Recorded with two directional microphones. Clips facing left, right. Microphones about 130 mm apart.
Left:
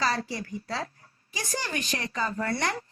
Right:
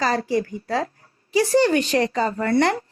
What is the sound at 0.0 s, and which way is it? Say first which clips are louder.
Speech: right 8 dB; 35° right (ahead or behind).